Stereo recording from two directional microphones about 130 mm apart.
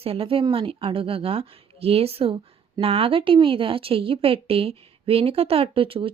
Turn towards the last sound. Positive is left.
turn(degrees=-45)  # may be behind; listen again after turning